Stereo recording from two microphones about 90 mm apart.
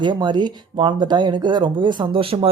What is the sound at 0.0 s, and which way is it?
Speech, 55° right (ahead or behind).